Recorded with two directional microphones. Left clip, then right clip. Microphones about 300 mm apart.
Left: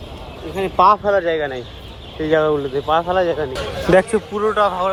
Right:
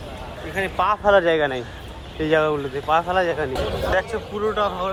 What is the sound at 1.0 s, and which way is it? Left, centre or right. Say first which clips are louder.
Speech: right 1 dB; centre.